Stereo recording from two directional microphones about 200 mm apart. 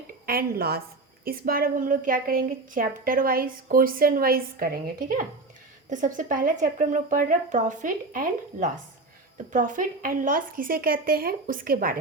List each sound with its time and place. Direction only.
0.3 s a woman's voice: 50° right (ahead or behind)